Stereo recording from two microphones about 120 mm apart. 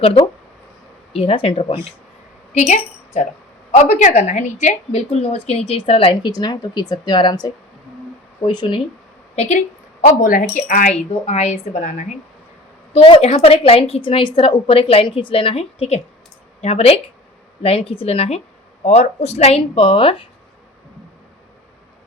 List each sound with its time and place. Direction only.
0.0 s a woman's voice: 50° left (ahead or behind)
3.7 s a woman's voice: 80° left; by 6.3 s 50° left (ahead or behind)
6.3 s speech: 35° left (ahead or behind)
9.3 s a woman's voice: 70° left (ahead or behind)
10.7 s a woman's voice: 80° left
12.9 s a woman's voice: 55° left (ahead or behind)